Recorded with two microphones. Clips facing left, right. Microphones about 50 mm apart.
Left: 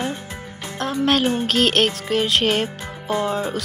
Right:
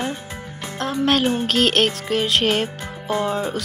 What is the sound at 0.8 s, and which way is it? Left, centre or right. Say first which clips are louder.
Music: even; centre.